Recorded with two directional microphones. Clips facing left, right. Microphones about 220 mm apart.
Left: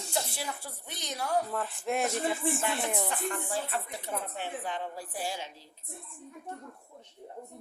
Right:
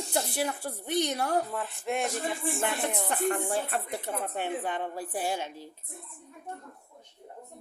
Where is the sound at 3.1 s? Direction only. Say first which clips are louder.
Right 5 dB; 55° right (ahead or behind).